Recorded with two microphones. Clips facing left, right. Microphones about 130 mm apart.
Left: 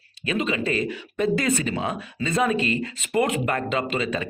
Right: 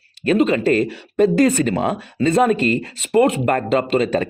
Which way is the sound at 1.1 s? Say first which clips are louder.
Right 8 dB; 40° right (ahead or behind).